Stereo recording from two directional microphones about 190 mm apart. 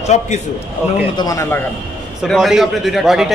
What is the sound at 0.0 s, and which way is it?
Speech, 35° left (ahead or behind).